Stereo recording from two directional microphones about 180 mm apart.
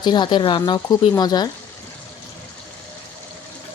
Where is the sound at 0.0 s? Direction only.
25° left (ahead or behind).